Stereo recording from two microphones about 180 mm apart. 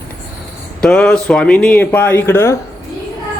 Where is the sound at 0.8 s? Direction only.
5° left (ahead or behind).